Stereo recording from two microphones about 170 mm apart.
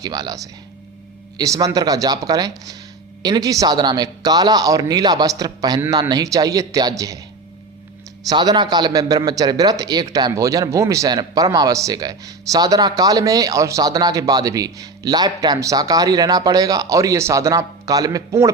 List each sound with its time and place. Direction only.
0.0 s a man's voice: 25° right (ahead or behind)
8.3 s a man's voice: 25° right (ahead or behind)